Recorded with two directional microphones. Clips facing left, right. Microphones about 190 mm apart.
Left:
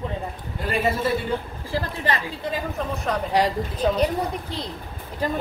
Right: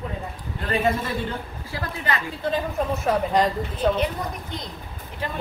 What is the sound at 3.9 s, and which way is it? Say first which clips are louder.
A woman's voice: left 3 dB; 35° left (ahead or behind).